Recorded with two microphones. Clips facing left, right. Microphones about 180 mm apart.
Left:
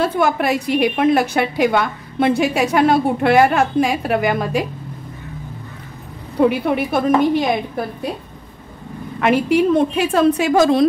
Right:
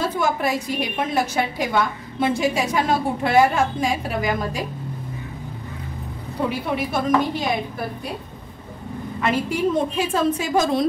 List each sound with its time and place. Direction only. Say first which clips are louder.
0.0 s a woman's voice: left 5 dB; 65° left (ahead or behind)
6.7 s a woman's voice: left 4 dB; 60° left (ahead or behind)
9.2 s a woman's voice: left 7 dB; 65° left (ahead or behind)